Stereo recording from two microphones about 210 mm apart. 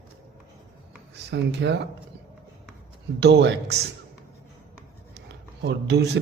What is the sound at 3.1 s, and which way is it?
Speech, 50° right (ahead or behind).